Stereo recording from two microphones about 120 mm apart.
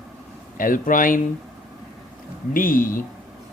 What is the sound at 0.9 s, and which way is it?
Speech, 90° left.